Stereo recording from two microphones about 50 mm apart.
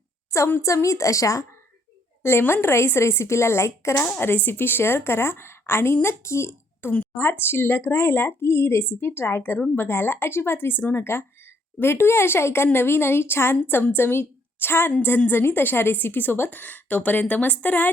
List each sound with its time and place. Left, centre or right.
0.3 s a woman's voice: left
0.6 s a woman's voice: left
2.5 s speech: left
4.2 s a woman's voice: left